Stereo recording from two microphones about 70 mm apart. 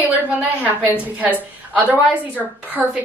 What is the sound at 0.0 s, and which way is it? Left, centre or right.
A woman's voice, right.